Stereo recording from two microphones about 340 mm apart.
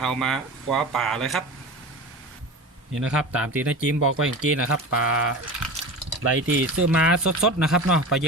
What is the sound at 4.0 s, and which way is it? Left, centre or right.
Speech, right.